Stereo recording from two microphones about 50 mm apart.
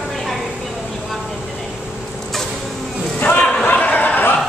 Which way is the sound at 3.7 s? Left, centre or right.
Left.